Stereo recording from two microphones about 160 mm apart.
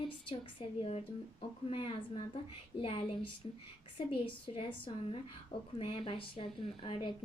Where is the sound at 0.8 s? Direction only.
40° left (ahead or behind).